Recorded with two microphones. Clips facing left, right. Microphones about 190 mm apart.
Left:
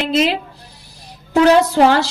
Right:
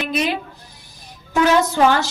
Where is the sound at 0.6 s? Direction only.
35° left (ahead or behind).